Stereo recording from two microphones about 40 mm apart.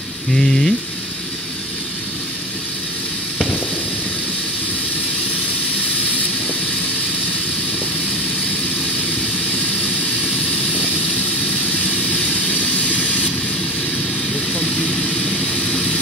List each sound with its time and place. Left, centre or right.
0.3 s speech: centre
11.8 s vehicle: left
14.5 s vehicle: centre